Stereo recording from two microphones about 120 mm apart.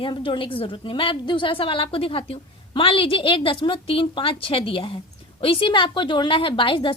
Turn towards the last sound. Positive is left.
turn(degrees=45)  # may be behind; listen again after turning